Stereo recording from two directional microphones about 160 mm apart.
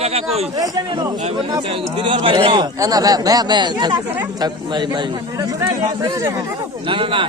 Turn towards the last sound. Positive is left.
turn(degrees=-35)  # may be behind; listen again after turning